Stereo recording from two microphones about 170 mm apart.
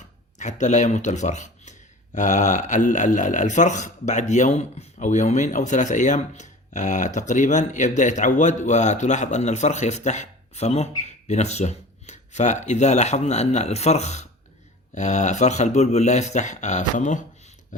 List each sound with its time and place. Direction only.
0.3 s a man's voice: 45° left (ahead or behind)